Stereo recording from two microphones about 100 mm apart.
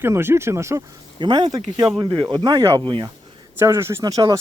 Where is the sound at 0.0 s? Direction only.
25° right (ahead or behind).